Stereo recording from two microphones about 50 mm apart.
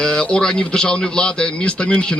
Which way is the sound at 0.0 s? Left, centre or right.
Centre.